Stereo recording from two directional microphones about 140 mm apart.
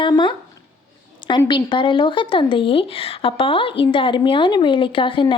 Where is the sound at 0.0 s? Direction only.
35° left (ahead or behind).